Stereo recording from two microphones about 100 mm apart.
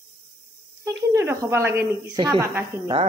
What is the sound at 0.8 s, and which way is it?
Speech, 30° right (ahead or behind).